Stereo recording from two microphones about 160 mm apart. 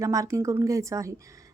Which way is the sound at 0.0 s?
20° right (ahead or behind).